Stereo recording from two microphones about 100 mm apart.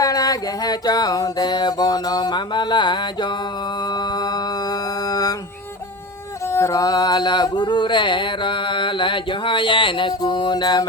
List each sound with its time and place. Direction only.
0.0 s mantra: 35° left (ahead or behind)
3.8 s music: 45° left (ahead or behind)
6.5 s mantra: 30° left (ahead or behind)